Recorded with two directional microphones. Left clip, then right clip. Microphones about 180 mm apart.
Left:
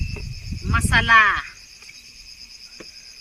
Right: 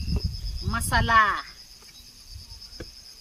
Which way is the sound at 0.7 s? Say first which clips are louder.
Left 6 dB; 40° right (ahead or behind).